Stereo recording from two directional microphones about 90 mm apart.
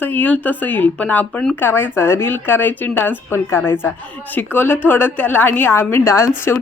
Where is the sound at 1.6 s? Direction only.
25° left (ahead or behind).